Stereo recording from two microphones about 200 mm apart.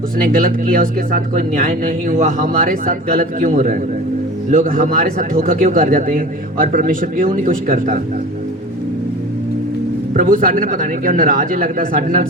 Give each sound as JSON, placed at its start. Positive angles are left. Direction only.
{"t": 0.2, "sound": "speech", "side_deg": -45}
{"t": 10.2, "sound": "speech", "side_deg": -45}